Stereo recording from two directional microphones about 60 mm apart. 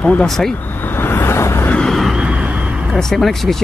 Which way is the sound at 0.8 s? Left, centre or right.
Left.